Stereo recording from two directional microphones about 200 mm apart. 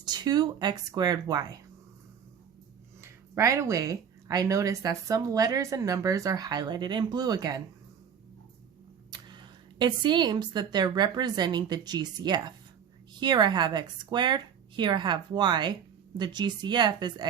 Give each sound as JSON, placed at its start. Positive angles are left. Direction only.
{"t": 0.0, "sound": "a woman's voice", "side_deg": -20}
{"t": 3.0, "sound": "speech", "side_deg": -15}
{"t": 9.0, "sound": "a woman's voice", "side_deg": -20}